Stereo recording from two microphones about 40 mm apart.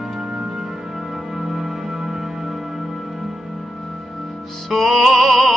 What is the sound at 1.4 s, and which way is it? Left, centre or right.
Music, centre.